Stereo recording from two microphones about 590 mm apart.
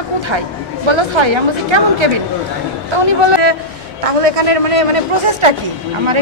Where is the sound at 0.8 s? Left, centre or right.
Right.